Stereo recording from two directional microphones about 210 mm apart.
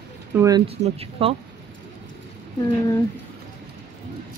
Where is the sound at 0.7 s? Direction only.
30° right (ahead or behind).